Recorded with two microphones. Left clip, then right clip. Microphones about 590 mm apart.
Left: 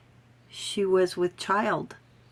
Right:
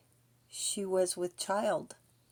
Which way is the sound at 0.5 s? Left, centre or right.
Right.